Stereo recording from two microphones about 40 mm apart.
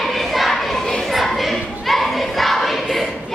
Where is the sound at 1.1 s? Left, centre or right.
Centre.